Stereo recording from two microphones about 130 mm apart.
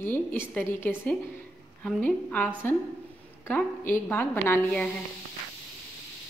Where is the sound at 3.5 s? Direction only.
15° left (ahead or behind).